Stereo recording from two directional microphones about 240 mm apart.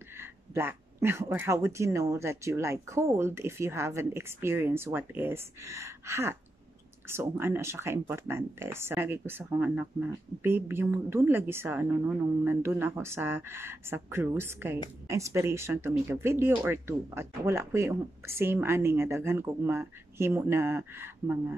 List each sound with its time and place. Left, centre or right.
0.2 s speech: centre